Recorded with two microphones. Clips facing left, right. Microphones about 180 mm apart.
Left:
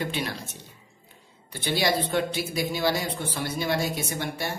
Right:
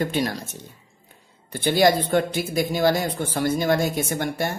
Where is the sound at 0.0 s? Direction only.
40° right (ahead or behind).